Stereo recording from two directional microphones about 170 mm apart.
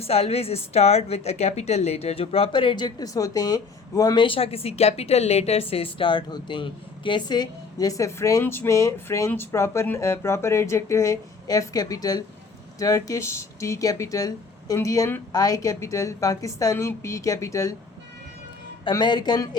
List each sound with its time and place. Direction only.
0.0 s a woman's voice: 35° left (ahead or behind); by 17.7 s 20° left (ahead or behind)
18.9 s a woman's voice: 25° left (ahead or behind)